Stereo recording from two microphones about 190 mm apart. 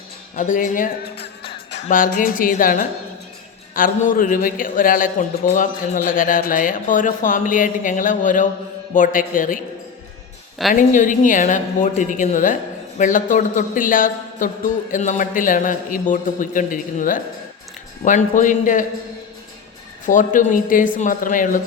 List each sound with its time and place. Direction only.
0.3 s a man's voice: 40° left (ahead or behind)
10.8 s a man's voice: 45° left (ahead or behind)
20.1 s a man's voice: 40° left (ahead or behind)